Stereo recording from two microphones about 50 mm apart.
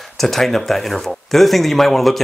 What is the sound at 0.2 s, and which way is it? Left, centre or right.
Speech, centre.